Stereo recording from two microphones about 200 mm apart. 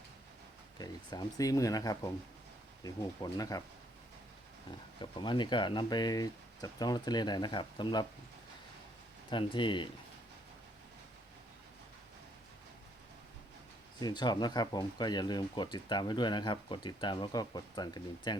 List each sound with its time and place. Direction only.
0.8 s speech: 20° left (ahead or behind)
4.9 s speech: 25° left (ahead or behind)
9.3 s speech: 25° left (ahead or behind)
14.0 s speech: 20° left (ahead or behind)